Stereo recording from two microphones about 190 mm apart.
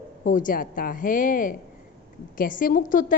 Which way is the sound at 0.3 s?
45° left (ahead or behind).